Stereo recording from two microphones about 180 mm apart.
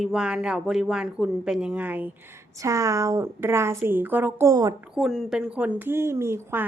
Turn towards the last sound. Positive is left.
turn(degrees=-15)  # may be behind; listen again after turning